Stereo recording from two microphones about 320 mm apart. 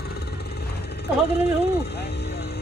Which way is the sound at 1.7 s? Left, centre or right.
Left.